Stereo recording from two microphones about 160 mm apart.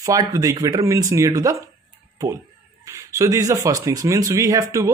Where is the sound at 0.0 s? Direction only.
20° right (ahead or behind).